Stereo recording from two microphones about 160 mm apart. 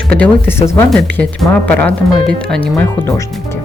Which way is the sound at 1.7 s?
10° left (ahead or behind).